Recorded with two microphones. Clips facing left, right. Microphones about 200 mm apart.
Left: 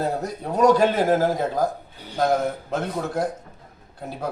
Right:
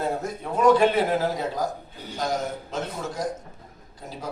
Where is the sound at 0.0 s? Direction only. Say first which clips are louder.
Left 2 dB; 40° left (ahead or behind).